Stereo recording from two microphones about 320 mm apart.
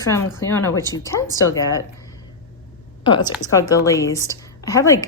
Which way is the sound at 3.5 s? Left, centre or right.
Centre.